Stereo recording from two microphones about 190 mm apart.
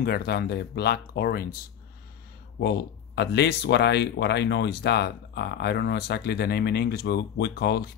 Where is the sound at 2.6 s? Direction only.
60° left (ahead or behind).